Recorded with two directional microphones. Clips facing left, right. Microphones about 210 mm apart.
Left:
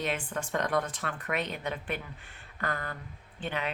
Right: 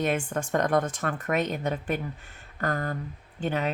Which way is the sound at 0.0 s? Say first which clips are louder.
Right 6 dB; 45° right (ahead or behind).